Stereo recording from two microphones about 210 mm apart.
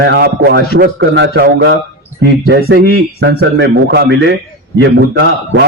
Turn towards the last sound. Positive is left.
turn(degrees=-60)  # may be behind; listen again after turning